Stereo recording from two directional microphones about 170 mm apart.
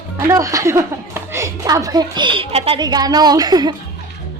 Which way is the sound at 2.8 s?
25° right (ahead or behind).